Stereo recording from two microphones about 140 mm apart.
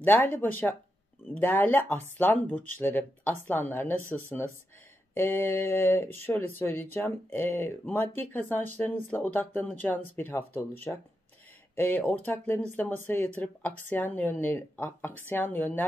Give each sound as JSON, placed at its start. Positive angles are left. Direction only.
{"t": 0.0, "sound": "a woman's voice", "side_deg": 15}